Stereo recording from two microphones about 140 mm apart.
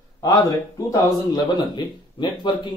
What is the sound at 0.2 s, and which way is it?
Speech, 25° left (ahead or behind).